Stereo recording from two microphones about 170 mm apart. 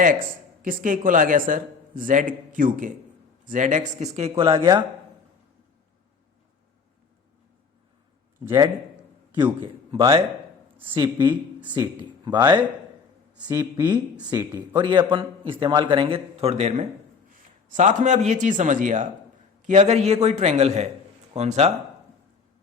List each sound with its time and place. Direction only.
0.0 s speech: 55° right (ahead or behind); by 4.9 s 30° right (ahead or behind)
8.4 s speech: 25° right (ahead or behind); by 21.7 s 40° right (ahead or behind)